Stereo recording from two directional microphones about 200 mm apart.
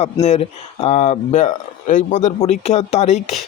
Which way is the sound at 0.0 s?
30° left (ahead or behind).